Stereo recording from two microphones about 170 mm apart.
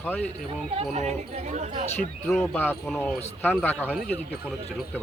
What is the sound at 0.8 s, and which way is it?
Speech, 40° right (ahead or behind).